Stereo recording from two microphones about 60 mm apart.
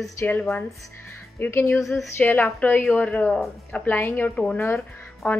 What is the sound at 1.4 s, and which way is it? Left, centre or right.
A woman's voice, left.